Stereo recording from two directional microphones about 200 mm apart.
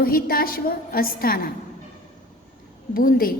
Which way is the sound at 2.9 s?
45° left (ahead or behind).